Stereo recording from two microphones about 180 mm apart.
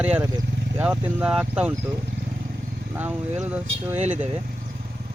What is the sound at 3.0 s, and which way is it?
Speech, 10° right (ahead or behind).